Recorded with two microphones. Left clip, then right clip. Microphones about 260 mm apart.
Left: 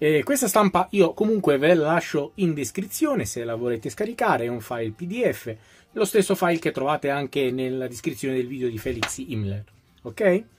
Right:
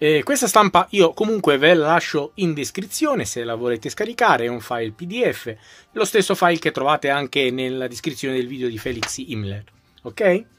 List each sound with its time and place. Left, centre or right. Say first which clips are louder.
0.0 s speech: right 3 dB; right
10.1 s speech: right 3 dB; right